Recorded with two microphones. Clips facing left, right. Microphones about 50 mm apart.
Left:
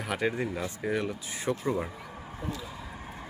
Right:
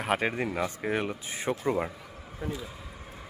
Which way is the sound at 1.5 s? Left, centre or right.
Right.